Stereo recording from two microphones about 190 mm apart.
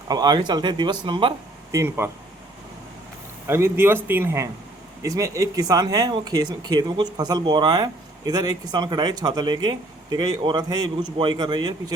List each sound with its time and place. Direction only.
0.1 s speech: 20° right (ahead or behind)
1.7 s speech: 15° right (ahead or behind)
3.4 s speech: 15° right (ahead or behind)